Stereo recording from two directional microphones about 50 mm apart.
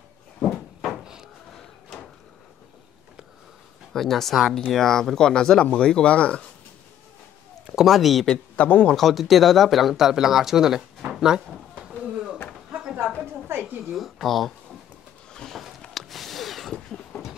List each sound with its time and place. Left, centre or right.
0.4 s cupboard open or close: centre
3.9 s speech: centre; by 6.5 s left
7.6 s speech: centre
8.5 s a man's voice: left
8.9 s speech: centre
13.7 s speech: centre
15.3 s a sound: centre
17.1 s a sound: centre